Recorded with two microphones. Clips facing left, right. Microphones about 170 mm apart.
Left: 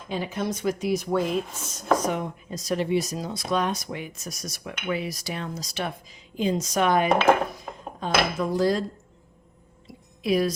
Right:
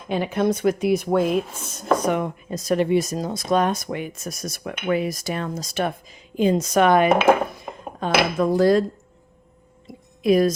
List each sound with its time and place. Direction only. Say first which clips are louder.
0.1 s speech: right 7 dB; 60° right (ahead or behind)
7.7 s dishes: right 3 dB; 5° right (ahead or behind)
8.0 s speech: right 5 dB; 65° right (ahead or behind)
9.8 s a sound: right 8 dB; 50° right (ahead or behind)